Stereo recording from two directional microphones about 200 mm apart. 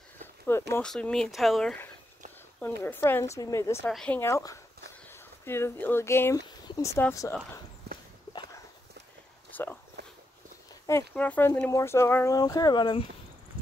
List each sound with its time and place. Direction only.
0.2 s a sound: 10° left (ahead or behind)
0.7 s speech: 5° left (ahead or behind)
3.8 s speech: 5° left (ahead or behind)
7.9 s walk: 55° right (ahead or behind)
9.5 s a sound: 10° left (ahead or behind)
10.0 s walk: 55° right (ahead or behind)
10.9 s speech: 10° left (ahead or behind)